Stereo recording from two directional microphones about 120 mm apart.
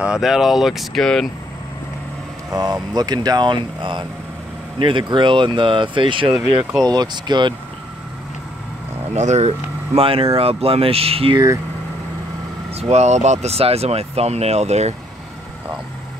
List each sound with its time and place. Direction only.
0.0 s speech: 5° right (ahead or behind)
2.5 s speech: 30° right (ahead or behind)
9.1 s speech: 70° right (ahead or behind); by 11.3 s 55° right (ahead or behind)
11.3 s speech: 30° right (ahead or behind)
12.7 s speech: 65° right (ahead or behind)